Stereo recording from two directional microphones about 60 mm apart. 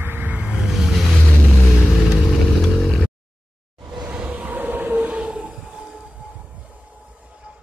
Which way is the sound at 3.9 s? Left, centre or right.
Centre.